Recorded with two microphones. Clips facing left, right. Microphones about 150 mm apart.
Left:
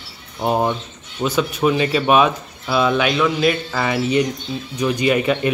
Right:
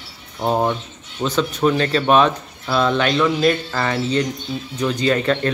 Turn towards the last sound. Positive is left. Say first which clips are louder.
# left 1 dB
turn(degrees=10)  # may be behind; listen again after turning